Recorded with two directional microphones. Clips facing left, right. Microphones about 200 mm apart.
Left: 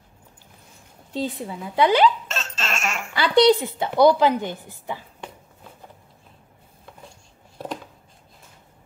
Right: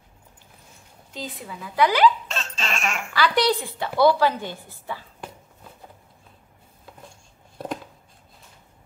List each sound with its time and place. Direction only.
1.1 s speech: 30° left (ahead or behind)
2.2 s baby laughter: centre (ahead or behind)
3.1 s a woman's voice: 25° left (ahead or behind)